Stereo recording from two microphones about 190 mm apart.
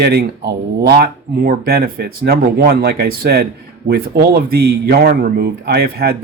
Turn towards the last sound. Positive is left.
turn(degrees=-55)  # may be behind; listen again after turning